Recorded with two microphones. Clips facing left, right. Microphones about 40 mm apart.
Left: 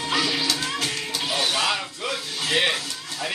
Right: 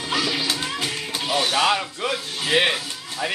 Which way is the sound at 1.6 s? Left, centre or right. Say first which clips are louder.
Right 4 dB; centre.